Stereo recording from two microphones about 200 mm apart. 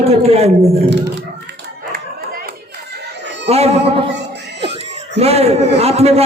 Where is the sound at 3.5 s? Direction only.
30° right (ahead or behind).